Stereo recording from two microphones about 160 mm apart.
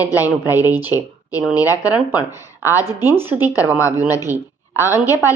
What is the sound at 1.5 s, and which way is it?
Speech, 20° left (ahead or behind).